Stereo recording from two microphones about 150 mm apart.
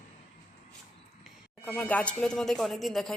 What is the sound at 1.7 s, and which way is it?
Speech, 10° left (ahead or behind).